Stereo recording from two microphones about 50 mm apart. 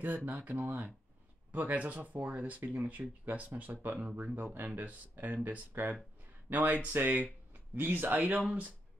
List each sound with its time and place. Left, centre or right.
0.0 s speech: right